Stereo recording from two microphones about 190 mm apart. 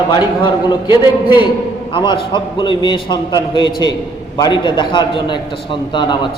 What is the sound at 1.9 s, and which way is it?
A man's voice, 25° left (ahead or behind).